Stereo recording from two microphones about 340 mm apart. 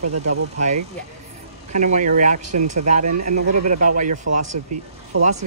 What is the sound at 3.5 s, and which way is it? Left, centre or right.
Speech, right.